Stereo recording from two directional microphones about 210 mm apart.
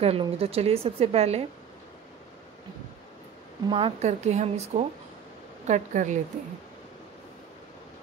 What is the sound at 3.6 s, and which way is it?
Speech, 25° right (ahead or behind).